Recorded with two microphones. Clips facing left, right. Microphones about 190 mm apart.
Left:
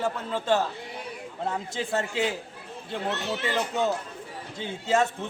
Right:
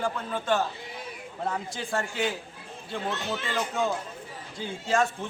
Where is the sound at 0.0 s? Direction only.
25° left (ahead or behind).